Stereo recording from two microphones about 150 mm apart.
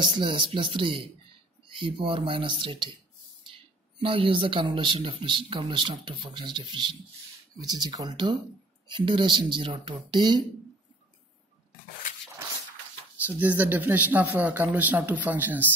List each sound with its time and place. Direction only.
0.2 s speech: 35° right (ahead or behind)
4.0 s speech: 35° right (ahead or behind)
13.2 s speech: 10° right (ahead or behind)